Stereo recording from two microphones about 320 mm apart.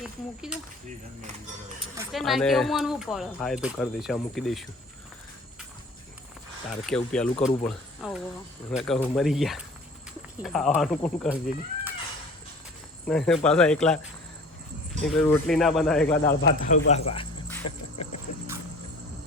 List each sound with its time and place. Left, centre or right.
0.0 s speech: centre
2.0 s speech: centre
6.7 s speech: centre
7.3 s speech: centre
7.6 s speech: centre
13.1 s speech: centre
15.0 s speech: centre
16.6 s speech: left